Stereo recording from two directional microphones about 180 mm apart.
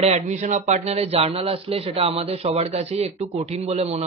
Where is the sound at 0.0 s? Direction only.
40° right (ahead or behind).